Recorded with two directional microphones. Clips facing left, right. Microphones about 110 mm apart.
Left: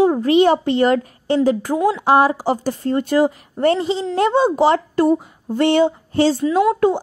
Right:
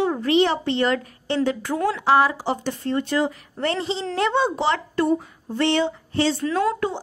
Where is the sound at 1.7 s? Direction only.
15° left (ahead or behind).